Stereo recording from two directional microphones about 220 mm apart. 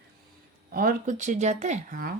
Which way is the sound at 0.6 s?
40° right (ahead or behind).